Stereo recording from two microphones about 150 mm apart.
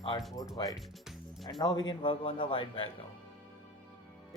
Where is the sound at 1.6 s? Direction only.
30° left (ahead or behind).